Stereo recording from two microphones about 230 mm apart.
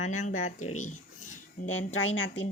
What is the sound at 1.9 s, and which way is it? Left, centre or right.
Speech, left.